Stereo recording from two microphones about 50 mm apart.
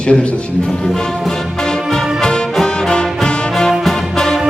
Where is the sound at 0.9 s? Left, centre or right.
Centre.